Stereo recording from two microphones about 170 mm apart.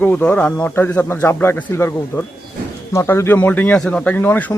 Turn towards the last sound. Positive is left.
turn(degrees=10)  # may be behind; listen again after turning